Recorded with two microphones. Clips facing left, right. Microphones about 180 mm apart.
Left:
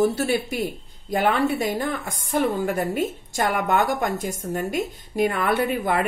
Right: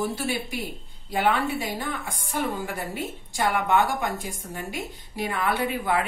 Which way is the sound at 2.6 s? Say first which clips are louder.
Left 8 dB; 45° left (ahead or behind).